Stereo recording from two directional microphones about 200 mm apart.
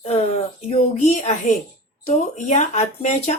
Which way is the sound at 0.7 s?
35° left (ahead or behind).